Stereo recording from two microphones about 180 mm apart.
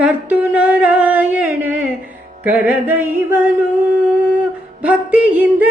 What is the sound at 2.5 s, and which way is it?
Speech, 10° right (ahead or behind).